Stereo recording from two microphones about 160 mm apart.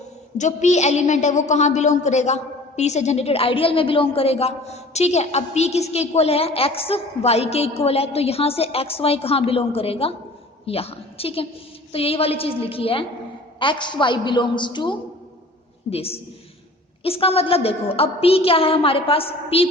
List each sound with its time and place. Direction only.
0.3 s a woman's voice: 50° left (ahead or behind)